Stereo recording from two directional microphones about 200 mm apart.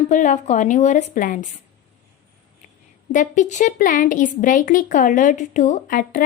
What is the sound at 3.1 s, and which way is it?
A woman's voice, 40° left (ahead or behind).